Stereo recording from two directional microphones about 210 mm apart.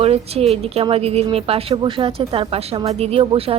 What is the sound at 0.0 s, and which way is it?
A woman's voice, 30° right (ahead or behind).